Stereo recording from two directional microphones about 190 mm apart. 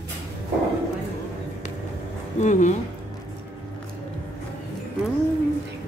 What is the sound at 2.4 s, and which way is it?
Speech, 40° left (ahead or behind).